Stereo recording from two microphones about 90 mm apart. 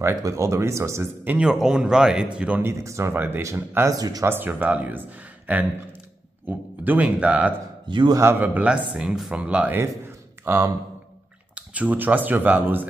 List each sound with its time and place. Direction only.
0.1 s speech: 35° right (ahead or behind)
1.4 s speech: 5° right (ahead or behind)
2.6 s speech: 35° right (ahead or behind)
3.9 s speech: 45° right (ahead or behind)
4.3 s speech: 20° right (ahead or behind)
7.9 s a man's voice: 60° right (ahead or behind)
8.4 s speech: 15° right (ahead or behind)
10.4 s speech: 30° right (ahead or behind)
11.5 s speech: 15° right (ahead or behind)